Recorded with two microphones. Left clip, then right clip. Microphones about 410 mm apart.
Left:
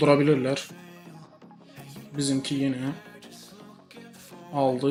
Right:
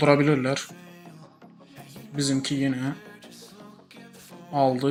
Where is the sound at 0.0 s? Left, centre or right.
Centre.